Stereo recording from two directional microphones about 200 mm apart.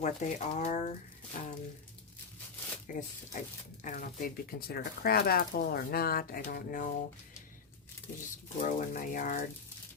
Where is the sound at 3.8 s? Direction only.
40° left (ahead or behind).